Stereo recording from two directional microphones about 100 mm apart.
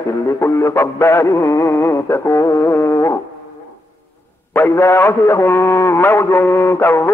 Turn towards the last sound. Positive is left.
turn(degrees=25)  # may be behind; listen again after turning